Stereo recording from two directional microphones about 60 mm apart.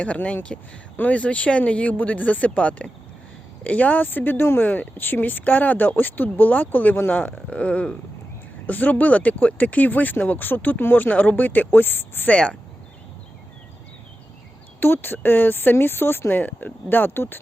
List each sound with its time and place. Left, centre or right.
0.0 s speech: left
12.3 s speech: centre
14.8 s speech: left